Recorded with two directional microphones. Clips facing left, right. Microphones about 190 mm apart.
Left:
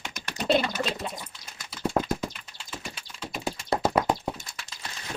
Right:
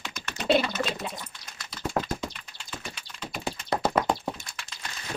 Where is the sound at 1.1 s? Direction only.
10° left (ahead or behind).